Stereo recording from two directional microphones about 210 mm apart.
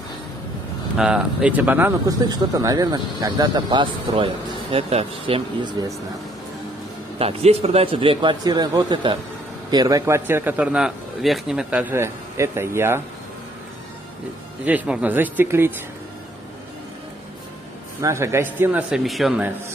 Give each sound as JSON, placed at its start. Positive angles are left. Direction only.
{"t": 0.9, "sound": "speech", "side_deg": -5}
{"t": 7.2, "sound": "a man's voice", "side_deg": -30}
{"t": 14.6, "sound": "a man's voice", "side_deg": -5}
{"t": 18.0, "sound": "a man's voice", "side_deg": -15}